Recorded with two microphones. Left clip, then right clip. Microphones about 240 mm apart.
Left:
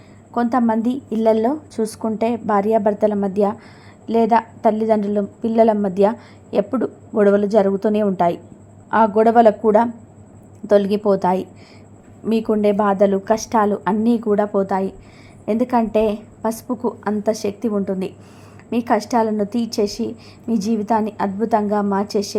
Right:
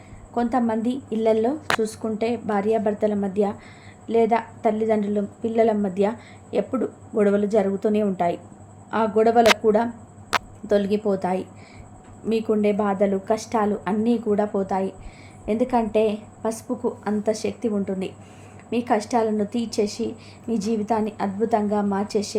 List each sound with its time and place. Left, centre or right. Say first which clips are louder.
0.5 s a woman's voice: left 6 dB; centre